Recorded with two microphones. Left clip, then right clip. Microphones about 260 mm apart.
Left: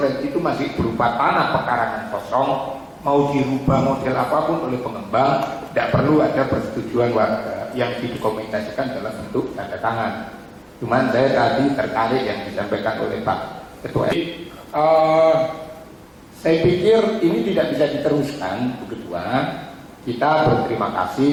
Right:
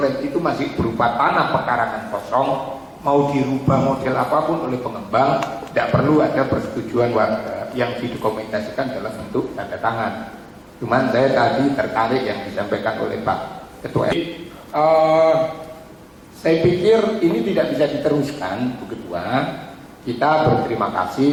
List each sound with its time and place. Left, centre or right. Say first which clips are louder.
0.0 s a man's voice: right 1 dB; centre
16.4 s a man's voice: even; centre